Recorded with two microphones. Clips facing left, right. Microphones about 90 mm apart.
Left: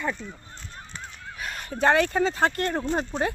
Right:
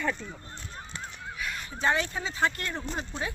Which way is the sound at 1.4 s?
45° left (ahead or behind).